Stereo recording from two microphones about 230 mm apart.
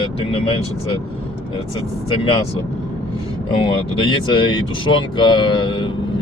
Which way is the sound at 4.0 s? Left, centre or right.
Left.